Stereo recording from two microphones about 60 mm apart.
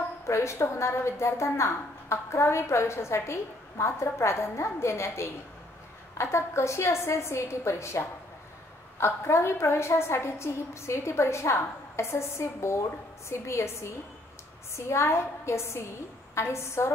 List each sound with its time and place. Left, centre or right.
0.2 s a woman's voice: left